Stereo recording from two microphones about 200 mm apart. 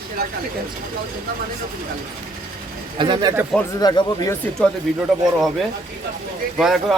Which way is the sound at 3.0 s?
25° right (ahead or behind).